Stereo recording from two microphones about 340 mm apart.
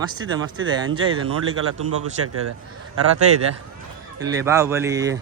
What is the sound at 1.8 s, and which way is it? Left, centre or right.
Speech, right.